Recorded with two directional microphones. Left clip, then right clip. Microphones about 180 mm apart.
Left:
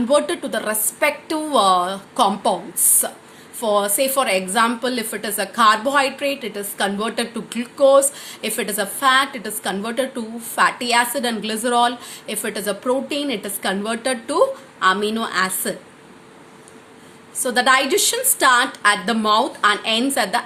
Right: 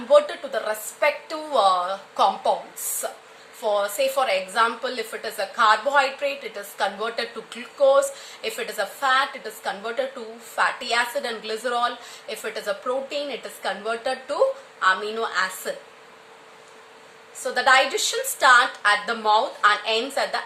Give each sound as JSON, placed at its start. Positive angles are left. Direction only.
{"t": 0.1, "sound": "a woman's voice", "side_deg": 30}
{"t": 17.4, "sound": "a woman's voice", "side_deg": 30}